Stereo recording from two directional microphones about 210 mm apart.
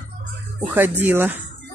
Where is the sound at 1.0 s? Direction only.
10° right (ahead or behind).